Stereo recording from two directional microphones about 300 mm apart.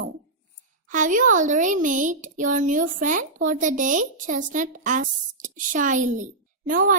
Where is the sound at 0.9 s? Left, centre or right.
Right.